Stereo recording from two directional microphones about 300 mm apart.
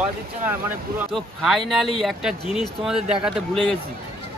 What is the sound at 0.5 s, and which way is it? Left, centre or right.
Speech, centre.